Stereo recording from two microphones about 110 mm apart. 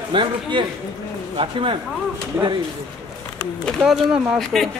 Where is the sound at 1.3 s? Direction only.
55° right (ahead or behind).